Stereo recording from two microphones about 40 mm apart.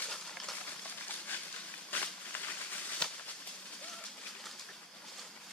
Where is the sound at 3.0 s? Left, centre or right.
Left.